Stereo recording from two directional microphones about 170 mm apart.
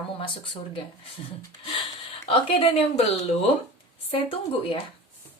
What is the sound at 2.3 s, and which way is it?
Speech, 35° left (ahead or behind).